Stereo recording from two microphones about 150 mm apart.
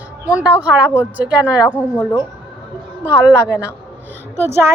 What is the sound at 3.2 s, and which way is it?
Speech, 10° right (ahead or behind).